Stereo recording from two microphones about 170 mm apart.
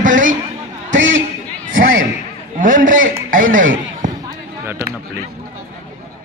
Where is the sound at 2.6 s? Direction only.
50° right (ahead or behind).